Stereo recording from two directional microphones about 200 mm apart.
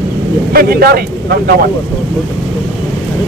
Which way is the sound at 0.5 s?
50° right (ahead or behind).